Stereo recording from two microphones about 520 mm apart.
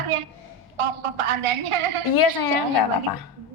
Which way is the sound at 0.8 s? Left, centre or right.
Right.